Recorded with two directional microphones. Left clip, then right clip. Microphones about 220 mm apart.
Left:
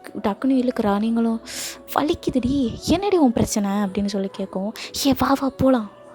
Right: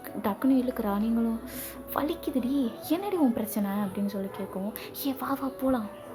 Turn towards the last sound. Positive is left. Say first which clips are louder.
# left 10 dB
turn(degrees=40)  # may be behind; listen again after turning